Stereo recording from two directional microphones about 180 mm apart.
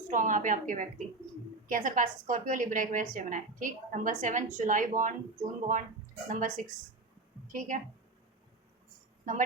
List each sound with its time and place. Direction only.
0.1 s a woman's voice: 45° right (ahead or behind)